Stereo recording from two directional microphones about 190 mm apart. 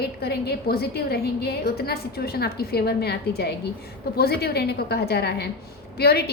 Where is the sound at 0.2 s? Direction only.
60° left (ahead or behind).